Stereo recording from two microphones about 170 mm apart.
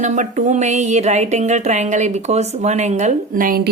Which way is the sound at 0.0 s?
45° right (ahead or behind).